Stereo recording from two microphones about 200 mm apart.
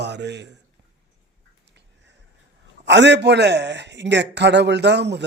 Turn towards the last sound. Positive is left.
turn(degrees=-60)  # may be behind; listen again after turning